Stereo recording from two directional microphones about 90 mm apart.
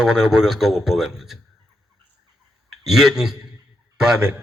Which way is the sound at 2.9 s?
5° right (ahead or behind).